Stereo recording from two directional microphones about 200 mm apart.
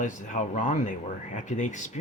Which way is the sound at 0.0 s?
40° left (ahead or behind).